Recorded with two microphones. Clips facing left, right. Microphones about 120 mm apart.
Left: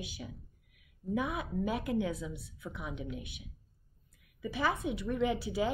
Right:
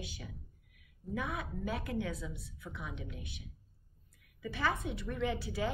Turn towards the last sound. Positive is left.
turn(degrees=15)  # may be behind; listen again after turning